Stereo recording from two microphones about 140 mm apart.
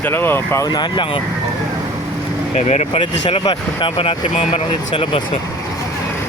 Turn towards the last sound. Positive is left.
turn(degrees=40)  # may be behind; listen again after turning